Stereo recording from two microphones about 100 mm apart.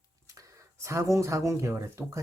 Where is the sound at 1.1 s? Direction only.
30° right (ahead or behind).